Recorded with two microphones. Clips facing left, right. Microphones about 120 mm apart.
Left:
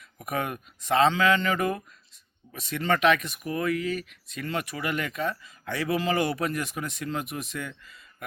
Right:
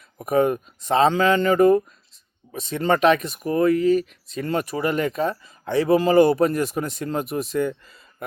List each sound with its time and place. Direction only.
0.2 s speech: 30° right (ahead or behind)